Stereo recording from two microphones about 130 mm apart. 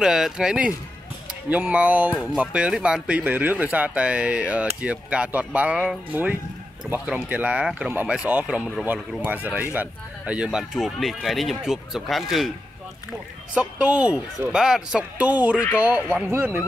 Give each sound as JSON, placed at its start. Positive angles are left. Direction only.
{"t": 0.0, "sound": "speech", "side_deg": -5}
{"t": 13.6, "sound": "speech", "side_deg": -10}